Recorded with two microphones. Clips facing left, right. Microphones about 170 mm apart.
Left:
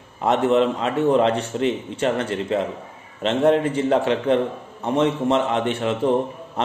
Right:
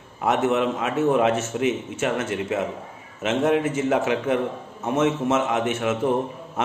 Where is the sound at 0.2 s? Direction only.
5° right (ahead or behind).